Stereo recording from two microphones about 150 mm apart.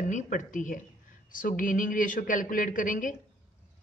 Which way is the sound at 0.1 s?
60° left (ahead or behind).